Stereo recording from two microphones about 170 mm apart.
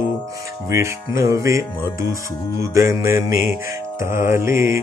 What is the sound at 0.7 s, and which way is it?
Mantra, 15° right (ahead or behind).